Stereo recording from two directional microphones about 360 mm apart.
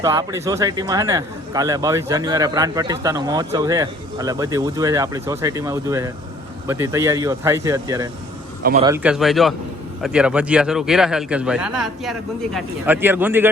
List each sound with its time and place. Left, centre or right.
0.0 s speech: centre
8.6 s a man's voice: centre
8.9 s a man's voice: centre